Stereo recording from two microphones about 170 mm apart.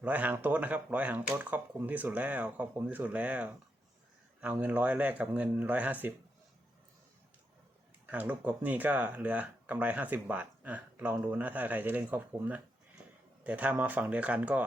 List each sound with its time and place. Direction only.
0.0 s speech: 10° right (ahead or behind)
8.0 s speech: 10° right (ahead or behind)